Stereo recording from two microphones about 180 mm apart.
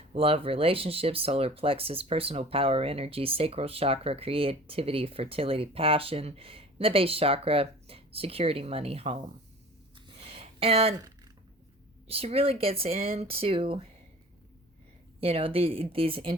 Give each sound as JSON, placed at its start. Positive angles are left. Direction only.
{"t": 0.1, "sound": "speech", "side_deg": -30}
{"t": 10.1, "sound": "a sound", "side_deg": -30}
{"t": 12.0, "sound": "speech", "side_deg": -35}
{"t": 15.2, "sound": "speech", "side_deg": -30}